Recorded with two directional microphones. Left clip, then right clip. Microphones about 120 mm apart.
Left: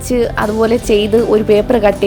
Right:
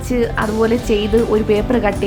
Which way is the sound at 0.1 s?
45° left (ahead or behind).